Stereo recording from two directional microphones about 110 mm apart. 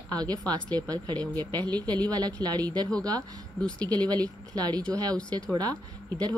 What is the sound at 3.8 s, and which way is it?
Speech, 35° right (ahead or behind).